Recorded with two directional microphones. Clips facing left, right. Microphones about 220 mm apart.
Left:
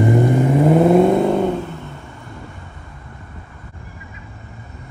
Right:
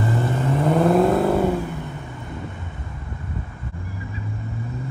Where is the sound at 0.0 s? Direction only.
15° left (ahead or behind); by 1.6 s 5° right (ahead or behind).